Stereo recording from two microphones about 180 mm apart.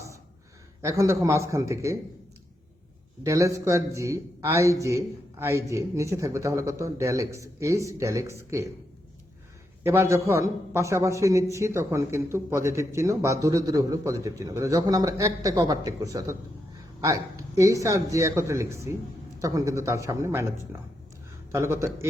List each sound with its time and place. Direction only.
0.8 s a man's voice: 15° right (ahead or behind)
3.2 s a man's voice: 15° right (ahead or behind)
9.8 s a man's voice: 15° right (ahead or behind)
21.5 s a man's voice: 15° right (ahead or behind)